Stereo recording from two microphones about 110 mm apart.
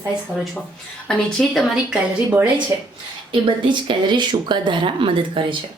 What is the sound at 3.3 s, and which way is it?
Speech, 50° right (ahead or behind).